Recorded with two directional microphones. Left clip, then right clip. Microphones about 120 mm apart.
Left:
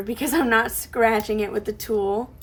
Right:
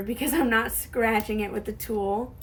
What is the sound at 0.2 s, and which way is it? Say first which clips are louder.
A woman's voice: left 4 dB; 40° left (ahead or behind).